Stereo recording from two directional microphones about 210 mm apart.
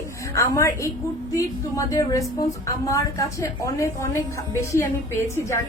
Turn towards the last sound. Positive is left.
turn(degrees=15)  # may be behind; listen again after turning